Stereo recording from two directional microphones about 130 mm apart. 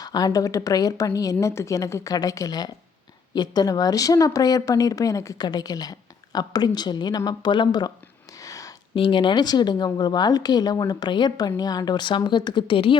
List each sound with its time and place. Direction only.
0.0 s speech: 30° left (ahead or behind)
8.4 s a sound: 25° left (ahead or behind)
9.0 s speech: 40° left (ahead or behind)